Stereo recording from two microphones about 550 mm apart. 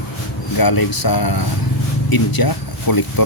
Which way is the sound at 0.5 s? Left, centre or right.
Left.